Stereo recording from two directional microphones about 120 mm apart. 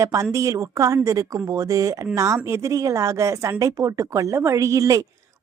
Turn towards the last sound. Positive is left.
turn(degrees=-30)  # may be behind; listen again after turning